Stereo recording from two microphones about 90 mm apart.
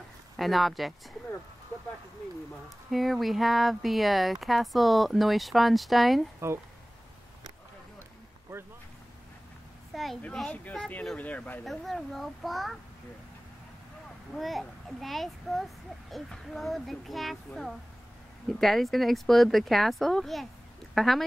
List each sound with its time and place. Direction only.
0.4 s a child's voice: centre (ahead or behind)
2.9 s a child's voice: centre (ahead or behind)
10.2 s speech: 10° left (ahead or behind)
11.6 s a child's voice: centre (ahead or behind)
14.3 s a child's voice: centre (ahead or behind)